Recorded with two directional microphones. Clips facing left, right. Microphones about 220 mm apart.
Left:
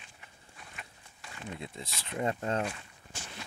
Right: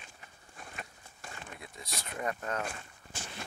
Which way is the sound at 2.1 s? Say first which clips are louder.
Left 4 dB; 25° left (ahead or behind).